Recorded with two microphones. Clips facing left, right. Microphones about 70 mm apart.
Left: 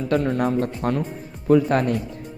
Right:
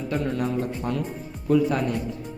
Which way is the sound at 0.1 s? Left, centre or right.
Left.